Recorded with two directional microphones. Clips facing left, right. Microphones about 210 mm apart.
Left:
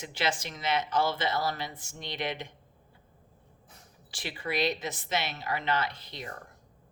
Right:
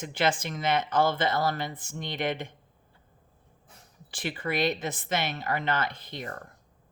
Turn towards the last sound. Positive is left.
turn(degrees=-50)  # may be behind; listen again after turning